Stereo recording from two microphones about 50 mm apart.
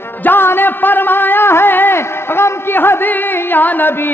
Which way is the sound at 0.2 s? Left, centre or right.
Left.